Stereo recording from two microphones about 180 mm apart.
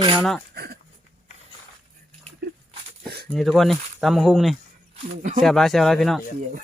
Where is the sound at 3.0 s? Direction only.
65° right (ahead or behind).